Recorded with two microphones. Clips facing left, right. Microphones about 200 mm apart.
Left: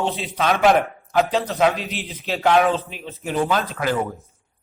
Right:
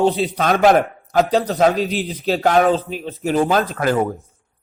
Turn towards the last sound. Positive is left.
turn(degrees=-45)  # may be behind; listen again after turning